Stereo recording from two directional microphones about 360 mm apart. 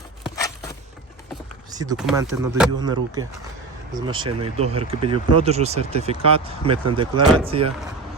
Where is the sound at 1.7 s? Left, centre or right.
Centre.